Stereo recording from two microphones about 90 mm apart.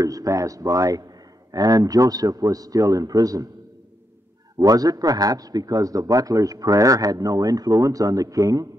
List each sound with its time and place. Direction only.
0.0 s a man's voice: 40° right (ahead or behind)
4.6 s a man's voice: 45° right (ahead or behind)